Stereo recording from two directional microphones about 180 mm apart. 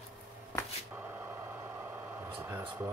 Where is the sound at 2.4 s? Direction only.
15° right (ahead or behind).